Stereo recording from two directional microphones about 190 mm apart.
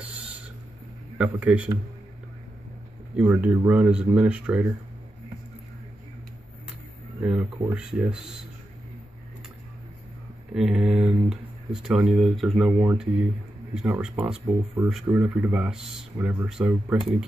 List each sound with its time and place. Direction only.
0.0 s owl: 5° right (ahead or behind)
1.1 s speech: 5° right (ahead or behind)
3.2 s speech: 5° right (ahead or behind)
7.2 s speech: 10° right (ahead or behind)
10.5 s speech: 5° right (ahead or behind)